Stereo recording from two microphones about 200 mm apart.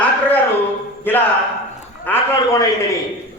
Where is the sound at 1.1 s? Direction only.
10° left (ahead or behind).